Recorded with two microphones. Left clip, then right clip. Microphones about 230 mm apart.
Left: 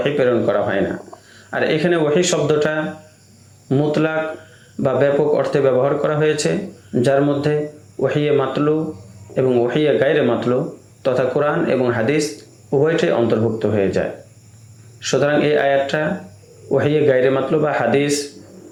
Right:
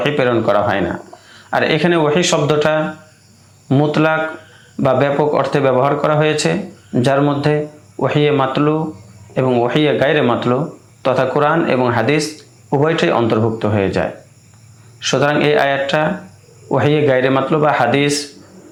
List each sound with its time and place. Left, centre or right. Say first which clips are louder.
0.0 s speech: right 1 dB; right